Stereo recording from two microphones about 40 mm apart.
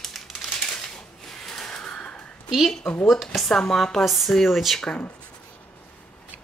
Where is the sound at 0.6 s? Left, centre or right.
Centre.